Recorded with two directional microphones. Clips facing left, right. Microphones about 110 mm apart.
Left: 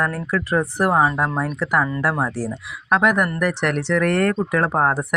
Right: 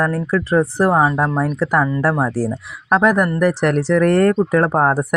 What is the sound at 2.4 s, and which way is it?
Speech, 45° right (ahead or behind).